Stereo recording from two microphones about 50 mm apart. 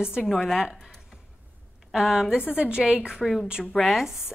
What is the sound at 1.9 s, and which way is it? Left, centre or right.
A woman's voice, centre.